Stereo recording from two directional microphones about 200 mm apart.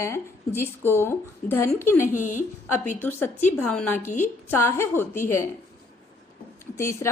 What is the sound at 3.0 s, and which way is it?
A woman's voice, 10° left (ahead or behind).